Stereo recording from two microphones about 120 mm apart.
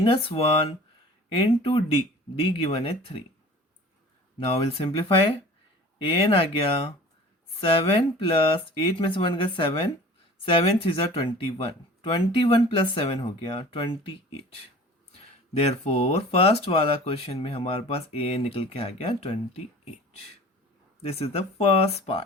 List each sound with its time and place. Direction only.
0.0 s speech: 50° left (ahead or behind)
4.4 s speech: 50° left (ahead or behind)
15.5 s speech: 60° left (ahead or behind)